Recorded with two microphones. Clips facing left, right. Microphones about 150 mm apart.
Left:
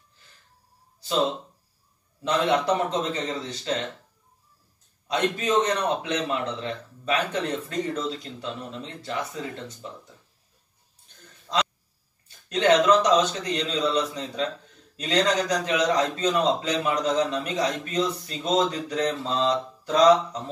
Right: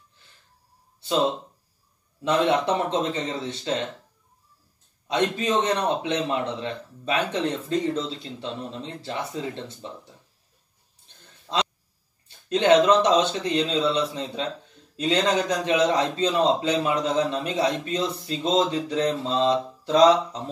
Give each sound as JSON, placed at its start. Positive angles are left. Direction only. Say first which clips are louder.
{"t": 2.3, "sound": "a man's voice", "louder": "right 1 dB", "side_deg": -25}
{"t": 5.1, "sound": "a man's voice", "louder": "even", "side_deg": -25}
{"t": 11.4, "sound": "a sound", "louder": "even", "side_deg": -25}
{"t": 12.3, "sound": "a man's voice", "louder": "right 2 dB", "side_deg": -25}